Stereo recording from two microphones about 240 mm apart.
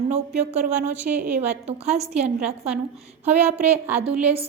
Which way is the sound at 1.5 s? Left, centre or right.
Right.